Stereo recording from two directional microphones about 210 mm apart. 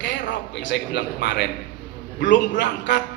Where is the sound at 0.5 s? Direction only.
55° left (ahead or behind).